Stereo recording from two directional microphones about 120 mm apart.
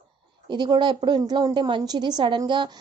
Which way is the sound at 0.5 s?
40° right (ahead or behind).